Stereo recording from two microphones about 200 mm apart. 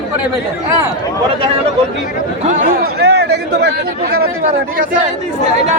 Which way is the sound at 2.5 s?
45° right (ahead or behind).